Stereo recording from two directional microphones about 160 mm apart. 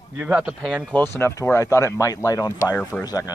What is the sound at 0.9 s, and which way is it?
Speech, 15° left (ahead or behind).